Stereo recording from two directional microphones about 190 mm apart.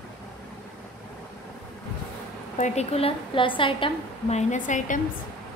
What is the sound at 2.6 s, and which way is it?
A woman's voice, 35° left (ahead or behind).